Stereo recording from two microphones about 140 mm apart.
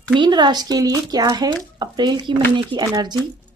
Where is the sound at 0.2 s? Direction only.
30° right (ahead or behind).